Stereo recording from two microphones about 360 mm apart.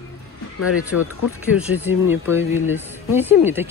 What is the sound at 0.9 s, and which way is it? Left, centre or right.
Speech, left.